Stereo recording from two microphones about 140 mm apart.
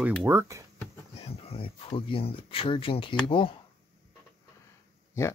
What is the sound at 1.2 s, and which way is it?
Speech, 45° left (ahead or behind).